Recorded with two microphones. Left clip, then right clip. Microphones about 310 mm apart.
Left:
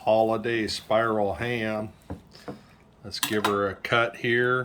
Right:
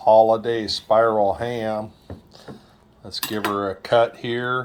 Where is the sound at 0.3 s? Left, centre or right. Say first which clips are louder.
Right 6 dB; centre.